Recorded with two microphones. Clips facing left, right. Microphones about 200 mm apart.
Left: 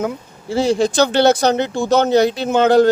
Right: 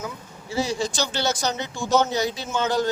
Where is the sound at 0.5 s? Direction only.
55° left (ahead or behind).